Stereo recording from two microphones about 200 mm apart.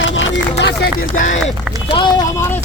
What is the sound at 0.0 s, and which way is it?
Music, 70° left (ahead or behind).